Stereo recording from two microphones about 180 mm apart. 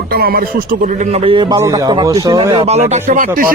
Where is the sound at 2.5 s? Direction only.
35° right (ahead or behind).